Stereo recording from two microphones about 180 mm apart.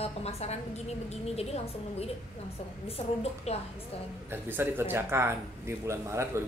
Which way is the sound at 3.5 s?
35° left (ahead or behind).